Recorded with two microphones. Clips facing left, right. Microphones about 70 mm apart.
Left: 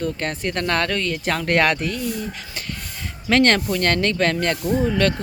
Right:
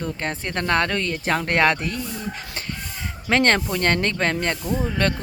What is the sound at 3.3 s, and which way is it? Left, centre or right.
Speech, right.